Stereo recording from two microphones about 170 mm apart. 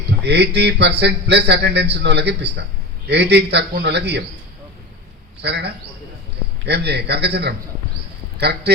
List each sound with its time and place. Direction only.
0.2 s a man's voice: 80° right
5.4 s speech: 75° right (ahead or behind)